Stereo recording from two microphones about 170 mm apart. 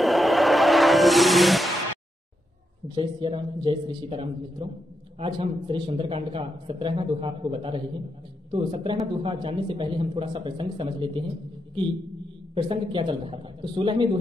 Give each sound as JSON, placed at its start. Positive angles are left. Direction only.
{"t": 0.0, "sound": "music", "side_deg": 0}
{"t": 2.9, "sound": "a man's voice", "side_deg": -25}